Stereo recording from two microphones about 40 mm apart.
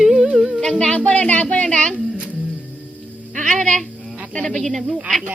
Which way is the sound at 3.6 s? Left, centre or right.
Centre.